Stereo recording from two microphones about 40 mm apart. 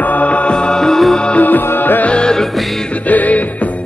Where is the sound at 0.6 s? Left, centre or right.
Centre.